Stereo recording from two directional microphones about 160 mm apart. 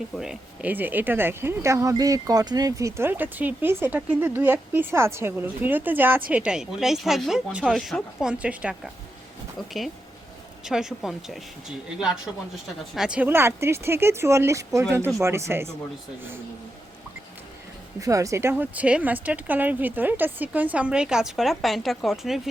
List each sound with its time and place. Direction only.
0.2 s speech: 5° right (ahead or behind)
10.6 s speech: 5° right (ahead or behind)
18.0 s speech: 20° right (ahead or behind); by 22.4 s centre (ahead or behind)